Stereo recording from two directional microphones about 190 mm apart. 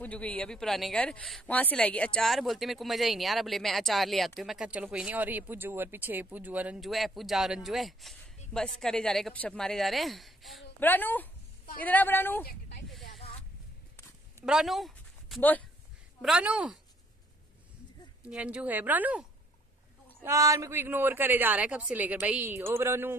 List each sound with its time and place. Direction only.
0.0 s a woman's voice: 10° left (ahead or behind)
12.4 s a sound: 60° left (ahead or behind)
12.8 s a sound: centre (ahead or behind)
14.4 s speech: centre (ahead or behind)
18.2 s a man's voice: 5° right (ahead or behind)
20.2 s a man's voice: 15° right (ahead or behind)